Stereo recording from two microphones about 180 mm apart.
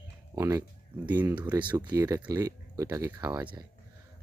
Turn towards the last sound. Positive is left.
turn(degrees=-20)  # may be behind; listen again after turning